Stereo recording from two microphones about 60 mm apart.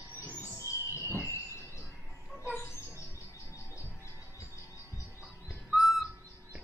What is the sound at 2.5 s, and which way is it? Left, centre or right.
Bird, left.